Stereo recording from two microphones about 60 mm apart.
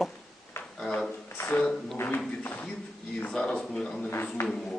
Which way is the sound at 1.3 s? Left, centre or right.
Left.